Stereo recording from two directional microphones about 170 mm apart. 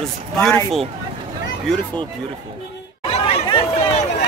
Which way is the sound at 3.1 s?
35° left (ahead or behind).